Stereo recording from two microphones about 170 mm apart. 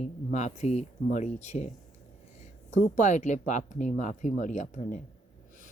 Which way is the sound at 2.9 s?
45° left (ahead or behind).